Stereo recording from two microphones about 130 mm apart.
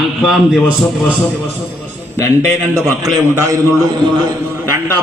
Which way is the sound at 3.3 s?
25° right (ahead or behind).